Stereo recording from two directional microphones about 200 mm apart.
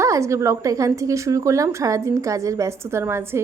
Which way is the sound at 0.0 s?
15° right (ahead or behind).